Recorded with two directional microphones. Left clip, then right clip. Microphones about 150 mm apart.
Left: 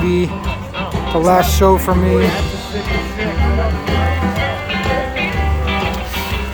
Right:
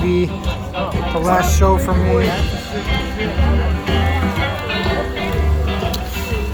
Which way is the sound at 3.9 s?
35° left (ahead or behind).